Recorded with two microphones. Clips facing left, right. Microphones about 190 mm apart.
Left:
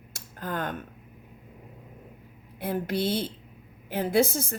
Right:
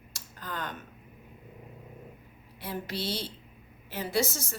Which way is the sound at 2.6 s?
55° left (ahead or behind).